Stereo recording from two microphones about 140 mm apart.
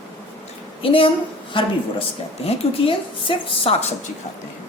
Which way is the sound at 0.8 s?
40° left (ahead or behind).